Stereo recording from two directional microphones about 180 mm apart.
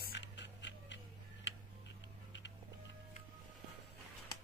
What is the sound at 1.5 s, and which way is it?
Tick-tock, 90° left.